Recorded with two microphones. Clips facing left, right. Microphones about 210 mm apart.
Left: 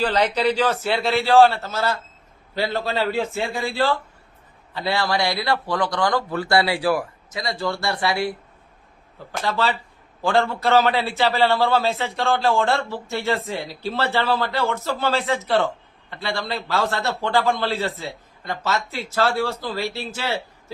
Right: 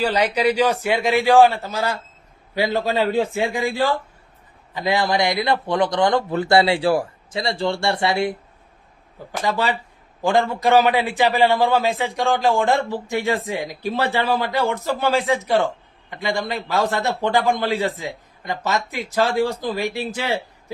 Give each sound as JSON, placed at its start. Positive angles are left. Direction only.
{"t": 0.0, "sound": "a man's voice", "side_deg": -10}
{"t": 9.4, "sound": "a man's voice", "side_deg": -15}